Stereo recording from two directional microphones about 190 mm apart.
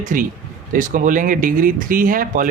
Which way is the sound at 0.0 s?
45° right (ahead or behind).